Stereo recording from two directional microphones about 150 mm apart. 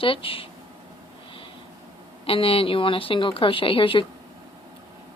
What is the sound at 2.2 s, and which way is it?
A woman's voice, 40° left (ahead or behind).